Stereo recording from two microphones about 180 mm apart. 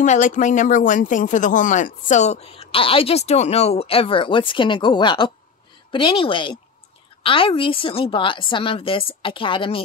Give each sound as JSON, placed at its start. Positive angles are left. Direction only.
{"t": 0.0, "sound": "a woman's voice", "side_deg": 40}